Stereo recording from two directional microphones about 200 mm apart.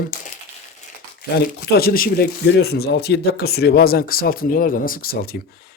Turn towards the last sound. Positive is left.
turn(degrees=50)  # may be behind; listen again after turning